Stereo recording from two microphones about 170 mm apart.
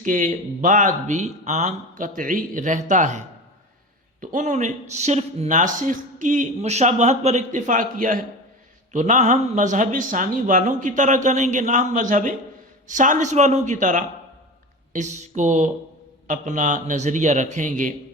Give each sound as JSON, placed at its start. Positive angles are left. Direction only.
{"t": 0.0, "sound": "speech", "side_deg": -50}
{"t": 4.2, "sound": "speech", "side_deg": -50}